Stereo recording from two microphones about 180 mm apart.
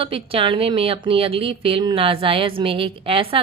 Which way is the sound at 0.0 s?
30° right (ahead or behind).